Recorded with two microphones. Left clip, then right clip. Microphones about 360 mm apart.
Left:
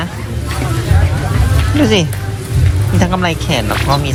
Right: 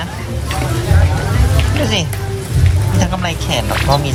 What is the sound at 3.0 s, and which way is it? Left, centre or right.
Speech, centre.